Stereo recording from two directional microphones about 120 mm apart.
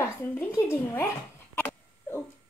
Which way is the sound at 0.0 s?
20° left (ahead or behind).